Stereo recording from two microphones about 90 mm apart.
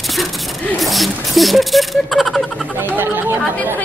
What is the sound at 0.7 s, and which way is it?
Speech, centre (ahead or behind).